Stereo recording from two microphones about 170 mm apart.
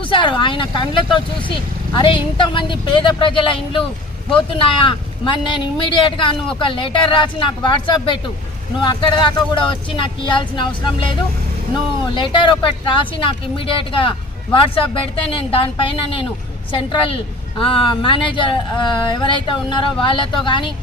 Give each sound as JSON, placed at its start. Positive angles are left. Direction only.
{"t": 0.0, "sound": "speech", "side_deg": 30}